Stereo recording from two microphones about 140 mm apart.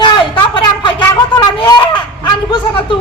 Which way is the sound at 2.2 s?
30° left (ahead or behind).